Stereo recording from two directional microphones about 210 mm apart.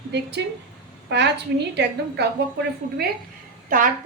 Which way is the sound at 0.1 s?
55° right (ahead or behind).